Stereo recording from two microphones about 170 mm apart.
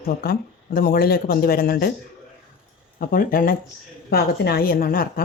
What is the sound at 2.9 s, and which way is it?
Speech, 55° left (ahead or behind).